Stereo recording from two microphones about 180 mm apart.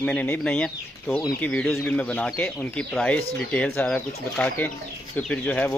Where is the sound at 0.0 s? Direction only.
5° left (ahead or behind).